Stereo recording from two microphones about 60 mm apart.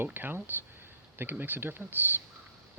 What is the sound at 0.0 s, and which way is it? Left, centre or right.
Speech, right.